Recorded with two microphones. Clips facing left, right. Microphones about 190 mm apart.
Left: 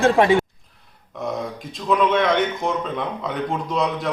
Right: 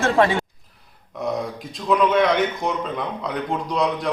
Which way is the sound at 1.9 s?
Centre (ahead or behind).